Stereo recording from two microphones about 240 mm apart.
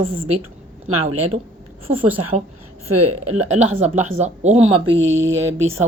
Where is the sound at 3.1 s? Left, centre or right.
Right.